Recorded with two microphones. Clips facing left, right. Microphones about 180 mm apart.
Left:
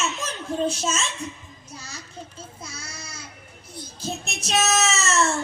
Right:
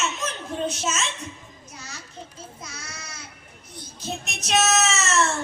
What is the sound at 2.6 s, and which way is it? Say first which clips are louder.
Speech: left 1 dB; 30° left (ahead or behind).